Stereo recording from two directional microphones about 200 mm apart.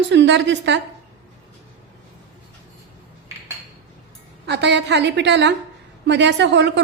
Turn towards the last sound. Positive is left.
turn(degrees=-60)  # may be behind; listen again after turning